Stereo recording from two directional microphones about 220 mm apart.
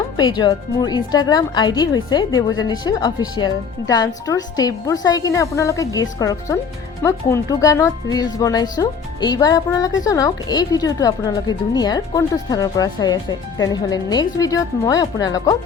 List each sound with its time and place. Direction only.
0.2 s a woman's voice: 20° left (ahead or behind)